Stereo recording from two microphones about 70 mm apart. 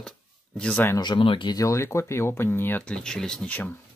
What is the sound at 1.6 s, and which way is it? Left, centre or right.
Speech, left.